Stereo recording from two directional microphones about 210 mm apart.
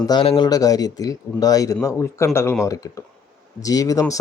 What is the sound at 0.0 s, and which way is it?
Speech, 20° left (ahead or behind).